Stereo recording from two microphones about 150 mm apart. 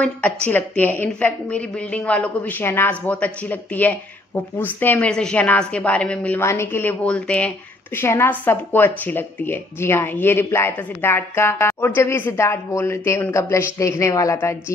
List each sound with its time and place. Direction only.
0.0 s speech: 10° left (ahead or behind)